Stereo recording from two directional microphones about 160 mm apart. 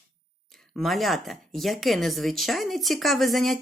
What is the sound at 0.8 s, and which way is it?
Speech, centre (ahead or behind).